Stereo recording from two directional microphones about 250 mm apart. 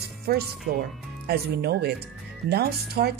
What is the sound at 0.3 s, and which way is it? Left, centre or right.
A woman's voice, right.